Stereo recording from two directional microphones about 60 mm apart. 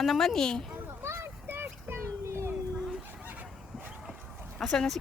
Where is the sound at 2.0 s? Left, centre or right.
Right.